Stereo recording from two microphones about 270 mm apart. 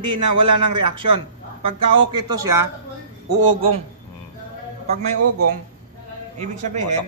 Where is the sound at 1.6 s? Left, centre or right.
Centre.